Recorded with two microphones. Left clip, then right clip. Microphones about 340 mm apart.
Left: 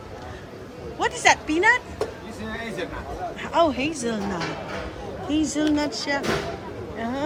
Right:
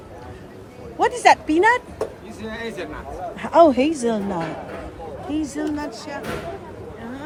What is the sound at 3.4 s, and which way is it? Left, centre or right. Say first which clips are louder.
Speech: right 7 dB; centre.